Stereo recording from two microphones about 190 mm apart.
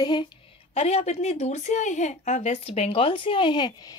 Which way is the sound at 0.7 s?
35° left (ahead or behind).